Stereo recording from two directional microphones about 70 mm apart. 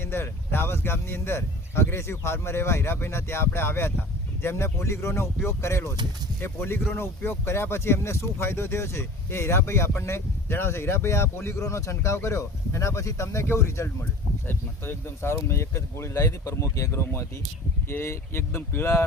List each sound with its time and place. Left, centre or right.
0.0 s speech: left
14.4 s speech: left